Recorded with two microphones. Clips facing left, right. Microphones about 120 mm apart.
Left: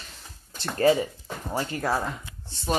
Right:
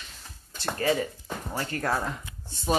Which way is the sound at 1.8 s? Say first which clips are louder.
Left 1 dB; 5° left (ahead or behind).